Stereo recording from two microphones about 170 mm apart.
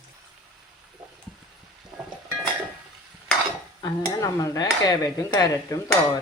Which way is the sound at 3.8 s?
20° left (ahead or behind).